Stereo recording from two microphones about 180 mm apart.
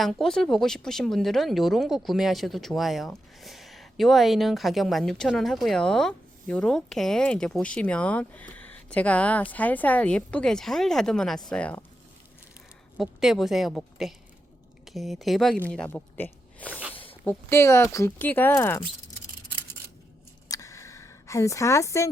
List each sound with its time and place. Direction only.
0.0 s speech: centre (ahead or behind)
13.0 s speech: centre (ahead or behind)
20.5 s a sound: 15° left (ahead or behind)